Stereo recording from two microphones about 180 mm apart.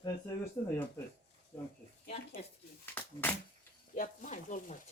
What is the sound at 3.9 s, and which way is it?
Speech, 45° left (ahead or behind).